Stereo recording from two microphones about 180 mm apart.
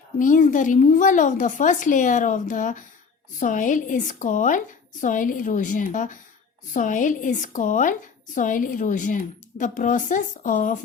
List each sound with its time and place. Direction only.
0.2 s speech: 45° left (ahead or behind)